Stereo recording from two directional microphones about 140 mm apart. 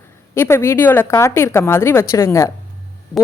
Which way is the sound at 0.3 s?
20° left (ahead or behind).